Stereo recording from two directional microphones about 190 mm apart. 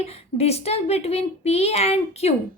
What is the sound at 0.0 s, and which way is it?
A woman's voice, 35° left (ahead or behind).